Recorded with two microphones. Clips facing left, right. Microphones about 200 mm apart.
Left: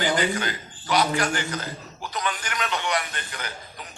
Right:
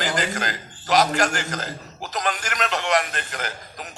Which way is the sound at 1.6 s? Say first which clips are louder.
Right 2 dB; 90° right.